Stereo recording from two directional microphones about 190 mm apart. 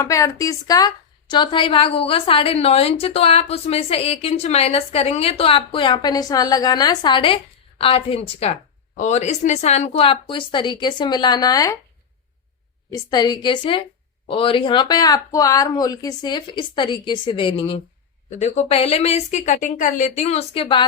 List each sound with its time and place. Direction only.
0.0 s a woman's voice: 15° left (ahead or behind)
12.9 s a woman's voice: 20° left (ahead or behind)